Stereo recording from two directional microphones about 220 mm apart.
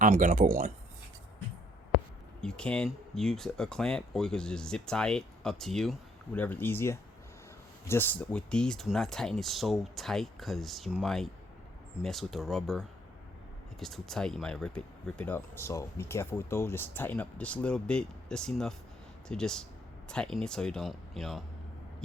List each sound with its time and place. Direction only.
0.0 s speech: 35° right (ahead or behind)
2.4 s speech: 5° left (ahead or behind)